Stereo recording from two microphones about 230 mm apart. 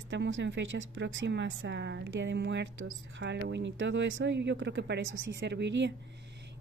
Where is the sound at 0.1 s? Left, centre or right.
Right.